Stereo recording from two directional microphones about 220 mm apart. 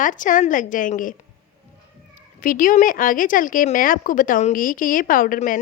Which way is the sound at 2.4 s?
40° left (ahead or behind).